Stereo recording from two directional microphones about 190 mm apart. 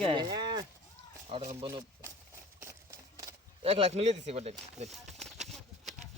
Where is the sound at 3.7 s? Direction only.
30° right (ahead or behind).